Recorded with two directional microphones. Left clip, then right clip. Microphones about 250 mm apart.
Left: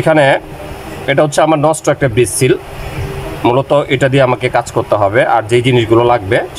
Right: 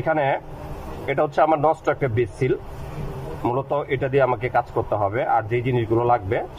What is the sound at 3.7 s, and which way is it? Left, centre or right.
Speech, centre.